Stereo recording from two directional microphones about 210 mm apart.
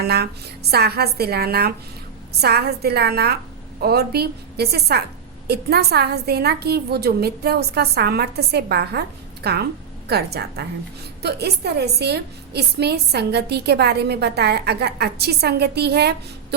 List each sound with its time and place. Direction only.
0.0 s a woman's voice: 50° right (ahead or behind)